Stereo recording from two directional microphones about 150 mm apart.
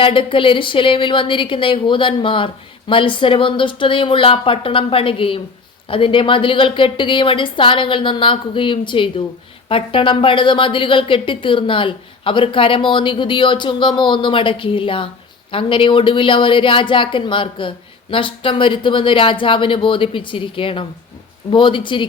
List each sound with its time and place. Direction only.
0.0 s a woman's voice: 35° left (ahead or behind)